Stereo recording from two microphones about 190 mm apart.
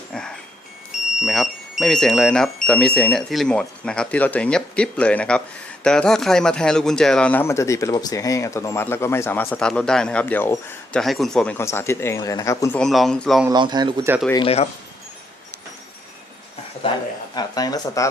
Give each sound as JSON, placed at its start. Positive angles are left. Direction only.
{"t": 0.1, "sound": "music", "side_deg": 5}
{"t": 1.2, "sound": "speech", "side_deg": 0}
{"t": 13.5, "sound": "speech", "side_deg": -20}
{"t": 14.3, "sound": "speech", "side_deg": 30}
{"t": 17.3, "sound": "speech", "side_deg": 20}